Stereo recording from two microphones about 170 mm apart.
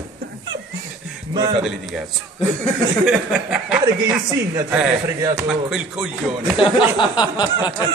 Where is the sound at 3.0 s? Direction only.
5° right (ahead or behind).